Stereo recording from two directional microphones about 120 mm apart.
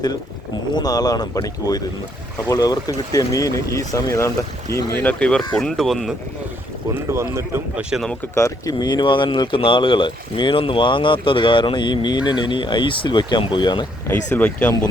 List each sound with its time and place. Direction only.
0.7 s speech: 35° left (ahead or behind); by 6.1 s centre (ahead or behind)
7.1 s speech: 20° right (ahead or behind)
7.8 s speech: 5° right (ahead or behind)
8.4 s speech: 25° left (ahead or behind)
14.1 s speech: 15° left (ahead or behind)